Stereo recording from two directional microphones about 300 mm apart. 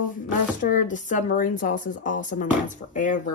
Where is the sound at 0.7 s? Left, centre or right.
Left.